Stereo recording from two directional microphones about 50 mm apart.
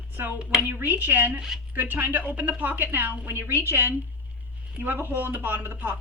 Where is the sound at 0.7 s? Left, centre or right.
Right.